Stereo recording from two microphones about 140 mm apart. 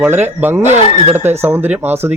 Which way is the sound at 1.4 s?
15° right (ahead or behind).